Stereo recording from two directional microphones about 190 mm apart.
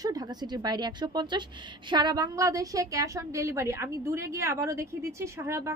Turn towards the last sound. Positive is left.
turn(degrees=-15)  # may be behind; listen again after turning